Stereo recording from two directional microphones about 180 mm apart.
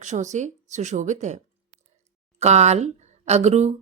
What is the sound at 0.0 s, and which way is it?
A woman's voice, 40° right (ahead or behind).